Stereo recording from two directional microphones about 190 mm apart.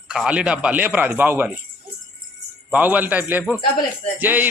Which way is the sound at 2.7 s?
10° right (ahead or behind).